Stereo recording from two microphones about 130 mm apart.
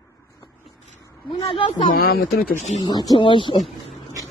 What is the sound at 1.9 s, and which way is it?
Speech, 90° left.